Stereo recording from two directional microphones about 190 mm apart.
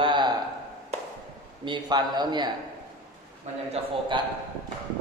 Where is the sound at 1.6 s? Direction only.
25° right (ahead or behind).